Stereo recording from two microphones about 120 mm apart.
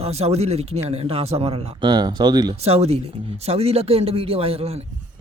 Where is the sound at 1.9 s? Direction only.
35° right (ahead or behind).